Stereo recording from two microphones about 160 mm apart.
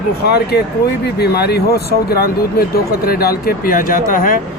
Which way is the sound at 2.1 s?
70° left (ahead or behind).